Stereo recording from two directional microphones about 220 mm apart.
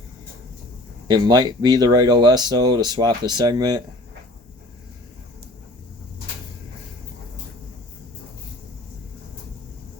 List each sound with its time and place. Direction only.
1.0 s speech: 20° right (ahead or behind)